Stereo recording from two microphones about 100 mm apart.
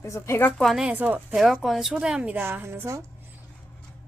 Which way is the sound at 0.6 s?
Centre (ahead or behind).